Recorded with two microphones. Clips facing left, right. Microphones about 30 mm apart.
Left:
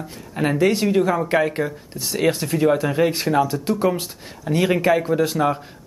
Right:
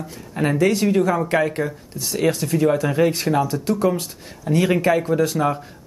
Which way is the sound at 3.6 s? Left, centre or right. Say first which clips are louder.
Even; left.